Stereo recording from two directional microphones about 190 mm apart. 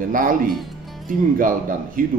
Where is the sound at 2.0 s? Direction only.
45° right (ahead or behind).